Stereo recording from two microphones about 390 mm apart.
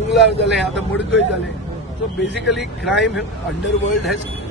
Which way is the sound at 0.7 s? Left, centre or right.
Left.